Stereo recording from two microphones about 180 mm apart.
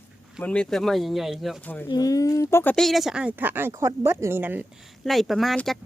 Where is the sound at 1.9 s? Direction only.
20° left (ahead or behind).